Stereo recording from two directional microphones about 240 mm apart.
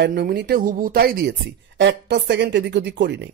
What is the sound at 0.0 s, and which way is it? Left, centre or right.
A man's voice, right.